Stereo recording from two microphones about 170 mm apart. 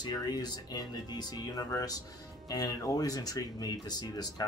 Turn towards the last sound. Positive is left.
turn(degrees=25)  # may be behind; listen again after turning